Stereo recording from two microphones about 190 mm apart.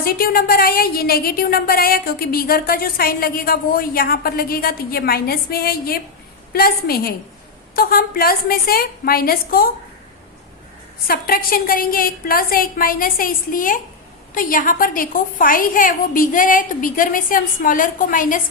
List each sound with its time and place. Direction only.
0.0 s a woman's voice: 50° left (ahead or behind)
11.1 s a woman's voice: 50° left (ahead or behind)